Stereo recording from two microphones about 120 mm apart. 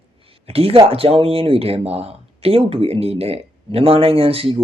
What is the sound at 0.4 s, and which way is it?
Speech, 55° right (ahead or behind).